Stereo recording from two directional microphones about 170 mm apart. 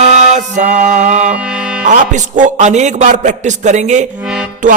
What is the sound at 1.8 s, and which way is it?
Music, 45° right (ahead or behind).